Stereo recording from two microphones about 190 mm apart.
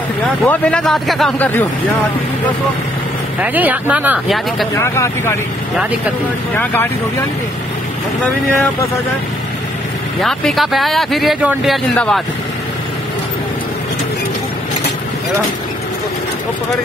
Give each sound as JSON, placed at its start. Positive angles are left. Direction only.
{"t": 0.5, "sound": "speech", "side_deg": 5}
{"t": 3.3, "sound": "speech", "side_deg": -10}
{"t": 4.7, "sound": "speech", "side_deg": 15}
{"t": 6.5, "sound": "speech", "side_deg": 10}
{"t": 10.2, "sound": "speech", "side_deg": 0}